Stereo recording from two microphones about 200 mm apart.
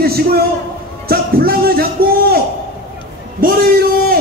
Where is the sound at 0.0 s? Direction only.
50° right (ahead or behind).